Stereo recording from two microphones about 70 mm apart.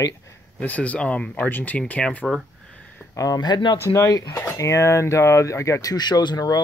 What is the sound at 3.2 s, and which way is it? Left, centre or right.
Speech, left.